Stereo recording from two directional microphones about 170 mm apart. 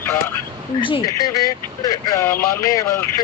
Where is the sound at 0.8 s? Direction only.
30° left (ahead or behind).